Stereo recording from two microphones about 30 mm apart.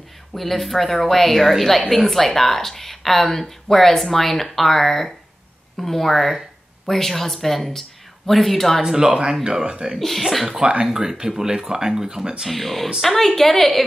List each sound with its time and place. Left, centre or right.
0.3 s speech: centre
8.8 s speech: right
9.9 s speech: centre
10.8 s speech: centre
12.4 s speech: centre